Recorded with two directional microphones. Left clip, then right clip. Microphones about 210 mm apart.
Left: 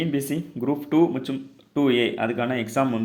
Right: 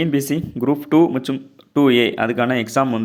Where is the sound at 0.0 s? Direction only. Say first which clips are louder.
Right 6 dB; 20° right (ahead or behind).